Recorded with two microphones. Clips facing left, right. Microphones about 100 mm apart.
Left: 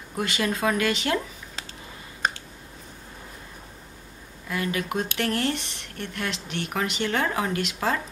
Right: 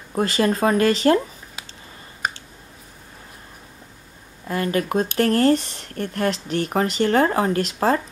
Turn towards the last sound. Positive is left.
turn(degrees=-40)  # may be behind; listen again after turning